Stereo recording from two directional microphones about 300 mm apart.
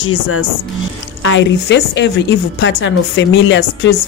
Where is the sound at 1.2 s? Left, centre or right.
Left.